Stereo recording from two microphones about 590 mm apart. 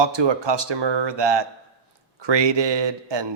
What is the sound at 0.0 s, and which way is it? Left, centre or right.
Speech, right.